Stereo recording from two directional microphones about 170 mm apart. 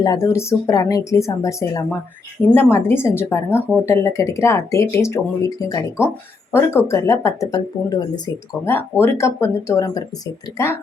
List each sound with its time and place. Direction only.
0.0 s speech: 20° left (ahead or behind)